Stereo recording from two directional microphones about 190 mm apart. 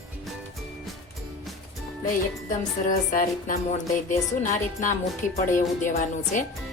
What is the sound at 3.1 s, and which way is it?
A woman's voice, 45° left (ahead or behind).